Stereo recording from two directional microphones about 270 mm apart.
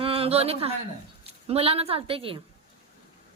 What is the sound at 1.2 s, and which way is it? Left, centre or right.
A woman's voice, right.